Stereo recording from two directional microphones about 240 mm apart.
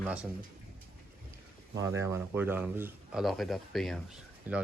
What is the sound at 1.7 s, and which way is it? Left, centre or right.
A man's voice, centre.